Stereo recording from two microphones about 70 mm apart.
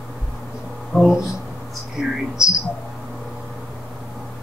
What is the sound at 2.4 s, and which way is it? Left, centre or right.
Speech, left.